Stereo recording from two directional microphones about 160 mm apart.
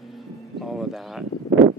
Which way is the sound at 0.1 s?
Centre (ahead or behind).